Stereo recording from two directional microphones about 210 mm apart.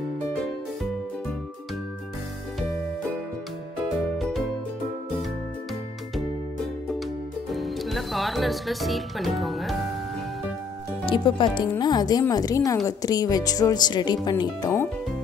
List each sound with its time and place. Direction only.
4.2 s music: centre (ahead or behind)
7.5 s speech: centre (ahead or behind)
11.1 s speech: 20° left (ahead or behind)